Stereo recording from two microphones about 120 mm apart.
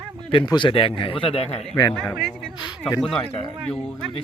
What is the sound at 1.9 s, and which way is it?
Speech, 5° left (ahead or behind).